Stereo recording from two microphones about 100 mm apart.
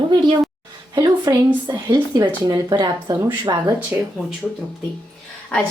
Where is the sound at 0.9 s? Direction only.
40° right (ahead or behind).